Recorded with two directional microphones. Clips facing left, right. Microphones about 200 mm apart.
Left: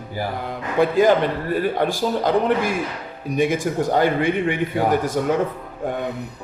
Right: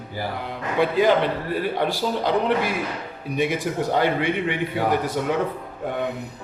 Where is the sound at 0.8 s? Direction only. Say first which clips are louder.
Left 3 dB; 45° left (ahead or behind).